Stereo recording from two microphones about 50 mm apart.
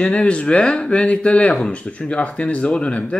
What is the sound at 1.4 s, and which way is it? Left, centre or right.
Speech, centre.